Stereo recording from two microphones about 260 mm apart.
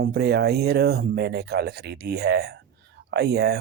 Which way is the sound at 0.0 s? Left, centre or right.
Right.